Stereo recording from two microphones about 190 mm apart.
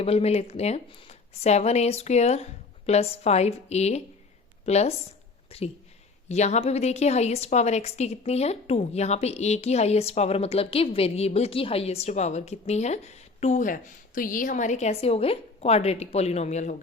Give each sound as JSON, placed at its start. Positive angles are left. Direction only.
{"t": 0.0, "sound": "a woman's voice", "side_deg": 30}